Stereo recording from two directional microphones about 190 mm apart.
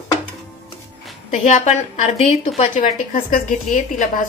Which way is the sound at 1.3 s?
40° left (ahead or behind).